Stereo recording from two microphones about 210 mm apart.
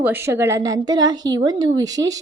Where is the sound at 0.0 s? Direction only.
10° right (ahead or behind).